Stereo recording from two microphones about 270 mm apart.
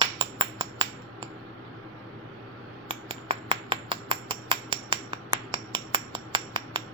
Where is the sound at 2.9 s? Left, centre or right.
Right.